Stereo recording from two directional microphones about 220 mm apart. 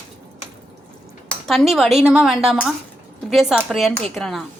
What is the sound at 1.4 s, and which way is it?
A woman's voice, centre (ahead or behind).